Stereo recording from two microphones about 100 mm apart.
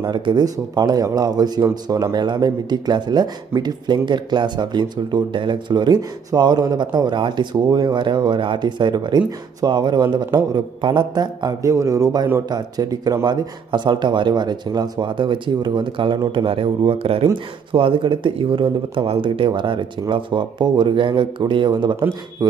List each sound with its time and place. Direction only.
0.0 s a man's voice: 50° right (ahead or behind)
11.7 s a man's voice: 30° right (ahead or behind); by 17.3 s 70° right (ahead or behind)
17.7 s speech: 60° right (ahead or behind); by 22.6 s 40° right (ahead or behind)